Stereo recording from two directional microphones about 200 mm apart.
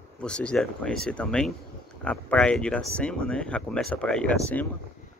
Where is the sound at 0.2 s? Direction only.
5° left (ahead or behind).